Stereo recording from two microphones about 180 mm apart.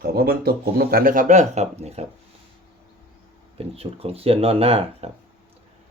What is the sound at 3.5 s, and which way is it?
Speech, 35° right (ahead or behind).